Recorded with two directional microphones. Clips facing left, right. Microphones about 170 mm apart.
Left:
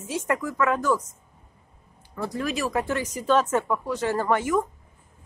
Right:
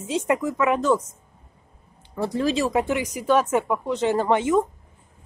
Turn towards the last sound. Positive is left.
turn(degrees=-20)  # may be behind; listen again after turning